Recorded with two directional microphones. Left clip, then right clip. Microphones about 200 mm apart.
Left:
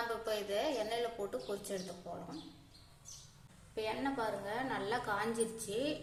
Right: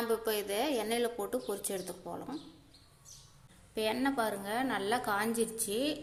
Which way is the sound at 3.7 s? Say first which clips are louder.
Right 5 dB; 45° right (ahead or behind).